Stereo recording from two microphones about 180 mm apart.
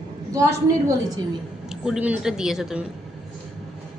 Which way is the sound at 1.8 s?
5° right (ahead or behind).